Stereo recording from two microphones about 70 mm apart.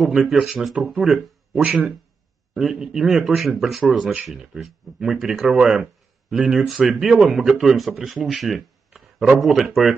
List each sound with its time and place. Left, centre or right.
0.0 s speech: centre
1.5 s speech: right
2.6 s speech: centre